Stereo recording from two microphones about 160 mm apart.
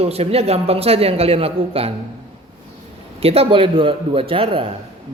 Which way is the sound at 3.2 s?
40° right (ahead or behind).